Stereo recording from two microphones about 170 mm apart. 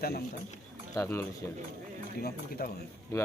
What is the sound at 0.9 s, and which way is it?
Speech, 15° left (ahead or behind).